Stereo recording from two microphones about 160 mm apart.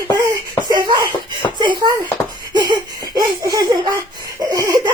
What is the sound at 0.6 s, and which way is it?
Speech, 25° right (ahead or behind).